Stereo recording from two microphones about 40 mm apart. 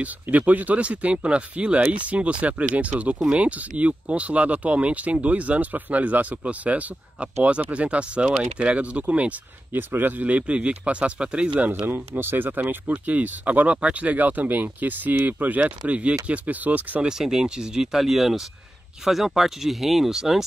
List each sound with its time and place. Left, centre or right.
0.0 s speech: right
9.7 s speech: right
10.2 s speech: right
11.8 s speech: right
13.0 s speech: right
15.9 s speech: right
17.2 s speech: centre